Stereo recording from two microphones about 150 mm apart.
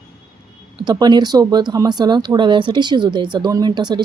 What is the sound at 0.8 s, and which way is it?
Speech, 30° right (ahead or behind).